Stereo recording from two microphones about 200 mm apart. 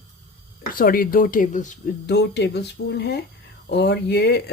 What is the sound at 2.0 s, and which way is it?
Speech, 60° left (ahead or behind).